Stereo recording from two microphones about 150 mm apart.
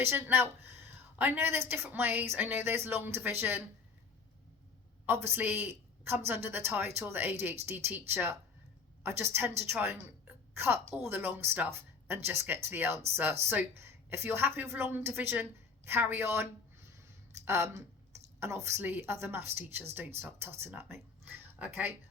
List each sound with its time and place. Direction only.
0.0 s a woman's voice: 15° right (ahead or behind)
5.0 s a woman's voice: 15° right (ahead or behind)